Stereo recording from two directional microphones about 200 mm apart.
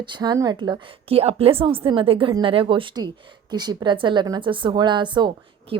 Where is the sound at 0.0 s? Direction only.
20° right (ahead or behind).